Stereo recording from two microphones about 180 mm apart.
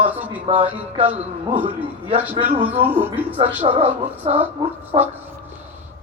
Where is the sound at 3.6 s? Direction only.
30° right (ahead or behind).